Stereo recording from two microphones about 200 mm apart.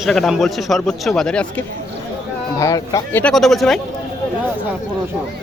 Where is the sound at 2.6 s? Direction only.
15° left (ahead or behind); by 3.8 s centre (ahead or behind).